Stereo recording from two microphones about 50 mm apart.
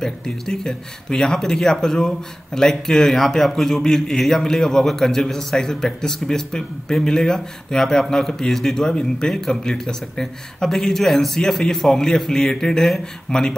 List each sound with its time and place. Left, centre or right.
0.0 s speech: centre